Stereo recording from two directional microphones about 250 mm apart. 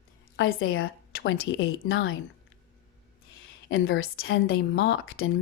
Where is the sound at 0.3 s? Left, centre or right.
Left.